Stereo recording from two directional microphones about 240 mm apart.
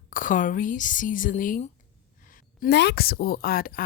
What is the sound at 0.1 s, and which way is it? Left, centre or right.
A woman's voice, left.